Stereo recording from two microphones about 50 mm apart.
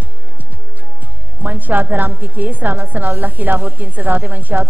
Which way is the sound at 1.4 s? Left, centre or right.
Right.